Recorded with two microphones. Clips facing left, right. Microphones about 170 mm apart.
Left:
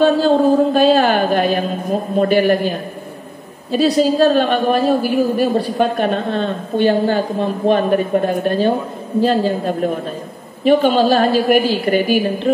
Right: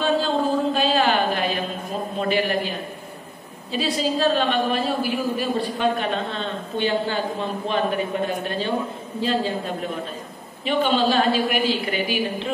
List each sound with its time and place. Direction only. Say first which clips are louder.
0.0 s music: left 9 dB; 45° left (ahead or behind)
3.7 s a woman's voice: left 9 dB; 45° left (ahead or behind)